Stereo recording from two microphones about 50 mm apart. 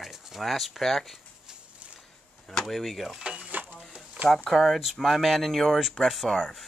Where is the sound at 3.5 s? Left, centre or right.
Right.